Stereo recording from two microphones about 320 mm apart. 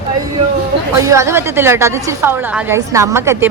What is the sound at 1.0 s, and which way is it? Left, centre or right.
A woman's voice, centre.